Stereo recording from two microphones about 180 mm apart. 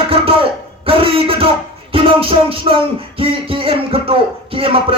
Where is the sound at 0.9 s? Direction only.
30° right (ahead or behind).